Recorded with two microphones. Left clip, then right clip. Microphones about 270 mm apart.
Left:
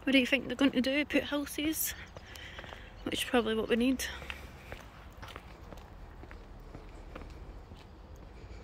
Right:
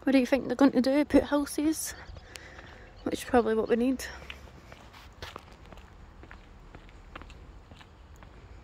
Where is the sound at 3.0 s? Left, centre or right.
Centre.